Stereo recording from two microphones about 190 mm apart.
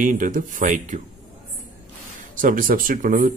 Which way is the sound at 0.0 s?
40° right (ahead or behind).